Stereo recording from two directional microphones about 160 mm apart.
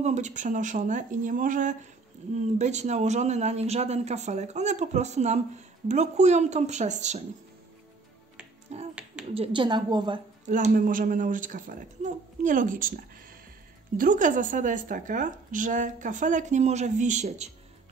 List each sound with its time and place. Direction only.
0.0 s speech: 50° right (ahead or behind)
8.7 s finger snapping: 45° right (ahead or behind)
9.3 s a woman's voice: 35° right (ahead or behind)
10.5 s a woman's voice: 55° right (ahead or behind)